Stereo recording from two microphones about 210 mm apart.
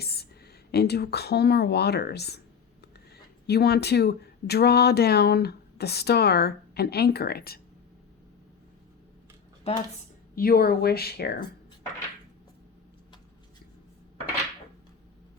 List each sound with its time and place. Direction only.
0.0 s a sound: 50° left (ahead or behind)
0.7 s speech: 50° left (ahead or behind)
3.4 s speech: 50° left (ahead or behind)
9.7 s speech: 30° left (ahead or behind)
10.3 s speech: 45° left (ahead or behind)